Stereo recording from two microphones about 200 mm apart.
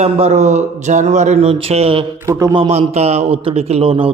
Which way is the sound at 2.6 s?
30° right (ahead or behind).